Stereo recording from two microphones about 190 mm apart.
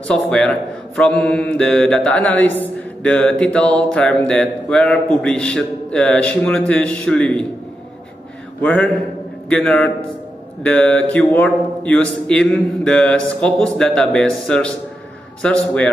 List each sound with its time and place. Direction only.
0.1 s speech: 5° left (ahead or behind)
8.5 s a man's voice: 10° left (ahead or behind)